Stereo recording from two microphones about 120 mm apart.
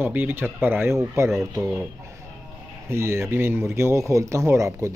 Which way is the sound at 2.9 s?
20° right (ahead or behind).